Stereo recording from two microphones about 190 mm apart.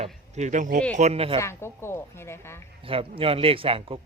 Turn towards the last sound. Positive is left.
turn(degrees=-30)  # may be behind; listen again after turning